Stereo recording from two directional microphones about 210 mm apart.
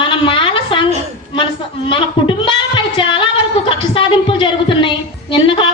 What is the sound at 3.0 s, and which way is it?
A woman's voice, 25° left (ahead or behind).